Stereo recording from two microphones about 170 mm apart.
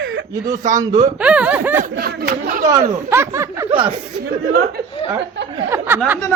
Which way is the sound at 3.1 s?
15° right (ahead or behind).